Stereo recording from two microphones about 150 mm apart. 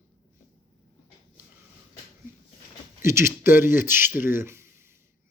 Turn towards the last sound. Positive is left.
turn(degrees=-15)  # may be behind; listen again after turning